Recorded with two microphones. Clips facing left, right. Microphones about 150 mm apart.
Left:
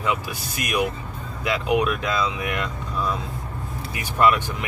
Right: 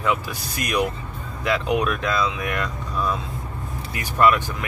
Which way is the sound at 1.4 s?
15° left (ahead or behind).